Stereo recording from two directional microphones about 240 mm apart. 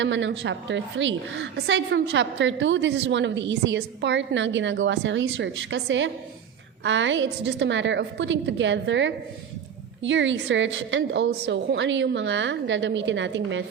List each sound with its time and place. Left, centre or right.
0.0 s a woman's voice: right